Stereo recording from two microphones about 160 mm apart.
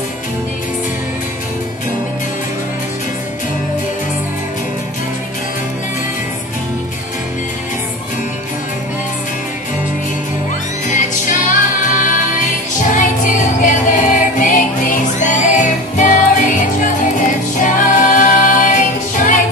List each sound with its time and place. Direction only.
10.9 s music: 50° left (ahead or behind)